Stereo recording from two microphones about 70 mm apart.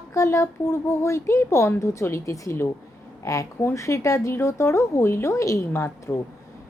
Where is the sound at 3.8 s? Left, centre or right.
Left.